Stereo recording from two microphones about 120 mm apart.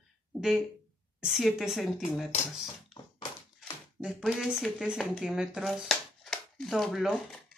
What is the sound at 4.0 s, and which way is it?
Speech, 5° right (ahead or behind).